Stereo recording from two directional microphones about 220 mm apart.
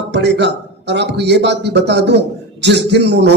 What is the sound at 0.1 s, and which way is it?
A man's voice, 50° right (ahead or behind).